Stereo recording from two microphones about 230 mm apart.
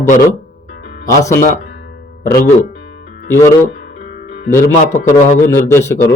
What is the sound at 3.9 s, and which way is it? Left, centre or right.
Music, left.